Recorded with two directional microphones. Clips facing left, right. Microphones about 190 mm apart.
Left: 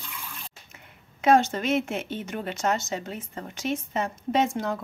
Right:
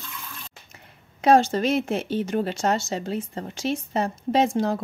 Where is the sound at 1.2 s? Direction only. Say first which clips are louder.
Right 3 dB; 35° right (ahead or behind).